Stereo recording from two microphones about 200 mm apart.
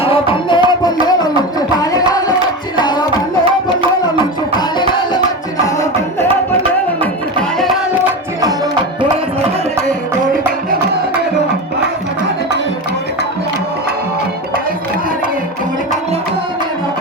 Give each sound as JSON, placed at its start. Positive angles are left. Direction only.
{"t": 0.0, "sound": "music", "side_deg": 25}
{"t": 4.2, "sound": "music", "side_deg": 20}